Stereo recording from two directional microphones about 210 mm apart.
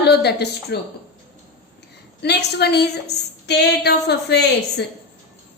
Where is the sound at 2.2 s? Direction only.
50° left (ahead or behind).